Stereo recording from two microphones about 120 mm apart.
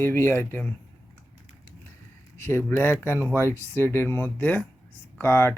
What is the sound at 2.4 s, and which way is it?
Speech, 15° left (ahead or behind).